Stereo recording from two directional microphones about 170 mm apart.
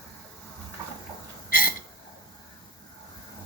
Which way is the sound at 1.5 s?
60° left (ahead or behind).